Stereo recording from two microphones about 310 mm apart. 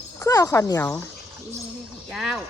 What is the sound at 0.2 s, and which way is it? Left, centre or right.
Speech, centre.